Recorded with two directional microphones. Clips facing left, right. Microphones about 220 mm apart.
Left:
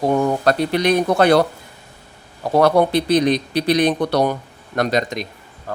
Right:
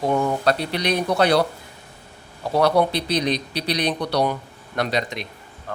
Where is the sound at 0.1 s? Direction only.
45° left (ahead or behind).